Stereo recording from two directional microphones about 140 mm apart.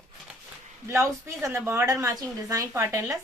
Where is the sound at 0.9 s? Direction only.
20° right (ahead or behind).